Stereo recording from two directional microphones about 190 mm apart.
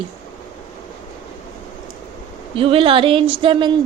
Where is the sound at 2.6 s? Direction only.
30° right (ahead or behind).